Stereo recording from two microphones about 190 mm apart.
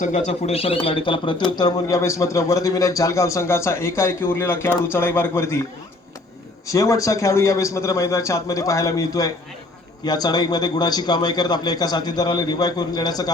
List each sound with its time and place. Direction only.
0.0 s a man's voice: 40° left (ahead or behind); by 5.6 s 15° left (ahead or behind)
6.7 s a man's voice: 15° left (ahead or behind)